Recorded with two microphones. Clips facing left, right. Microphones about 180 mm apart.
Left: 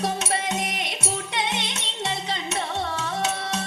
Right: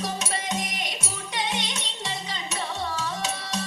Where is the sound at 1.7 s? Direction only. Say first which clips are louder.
Left 4 dB; 60° left (ahead or behind).